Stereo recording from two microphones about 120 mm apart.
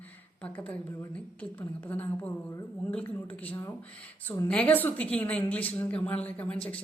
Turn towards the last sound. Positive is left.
turn(degrees=10)  # may be behind; listen again after turning